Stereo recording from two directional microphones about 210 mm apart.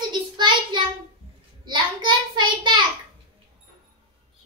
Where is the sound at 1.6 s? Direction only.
20° right (ahead or behind).